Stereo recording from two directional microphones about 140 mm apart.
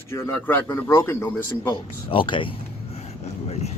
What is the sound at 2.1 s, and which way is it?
Speech, 35° left (ahead or behind).